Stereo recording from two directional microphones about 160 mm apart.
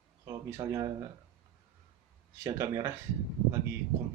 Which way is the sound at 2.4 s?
20° right (ahead or behind).